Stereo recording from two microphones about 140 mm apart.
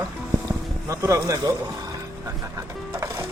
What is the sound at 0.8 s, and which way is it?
Speech, 25° right (ahead or behind).